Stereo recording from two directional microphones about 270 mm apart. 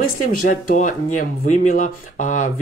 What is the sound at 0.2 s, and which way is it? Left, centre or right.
Speech, left.